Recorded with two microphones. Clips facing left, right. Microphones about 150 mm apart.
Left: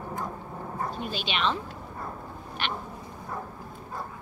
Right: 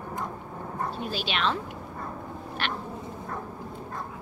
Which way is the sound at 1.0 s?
5° right (ahead or behind).